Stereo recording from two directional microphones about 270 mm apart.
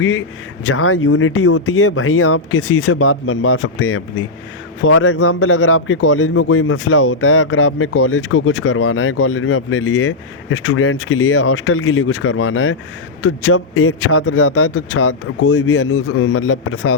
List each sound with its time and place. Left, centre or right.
0.0 s a man's voice: left